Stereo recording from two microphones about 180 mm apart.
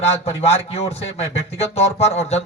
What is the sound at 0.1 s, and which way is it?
A man's voice, 35° left (ahead or behind).